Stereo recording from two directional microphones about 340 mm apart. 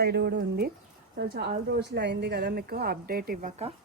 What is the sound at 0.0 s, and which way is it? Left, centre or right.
A woman's voice, right.